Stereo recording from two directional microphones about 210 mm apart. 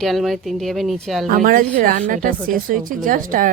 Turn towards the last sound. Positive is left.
turn(degrees=-40)  # may be behind; listen again after turning